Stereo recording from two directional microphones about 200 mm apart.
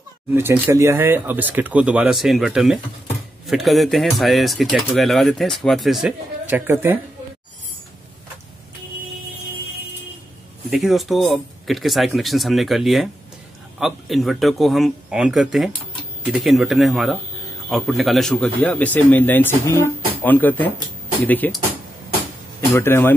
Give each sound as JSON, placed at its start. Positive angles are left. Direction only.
{"t": 0.3, "sound": "speech", "side_deg": -10}
{"t": 10.7, "sound": "speech", "side_deg": 0}
{"t": 22.7, "sound": "speech", "side_deg": 15}